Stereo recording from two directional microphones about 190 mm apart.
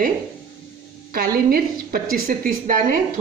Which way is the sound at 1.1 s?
50° right (ahead or behind).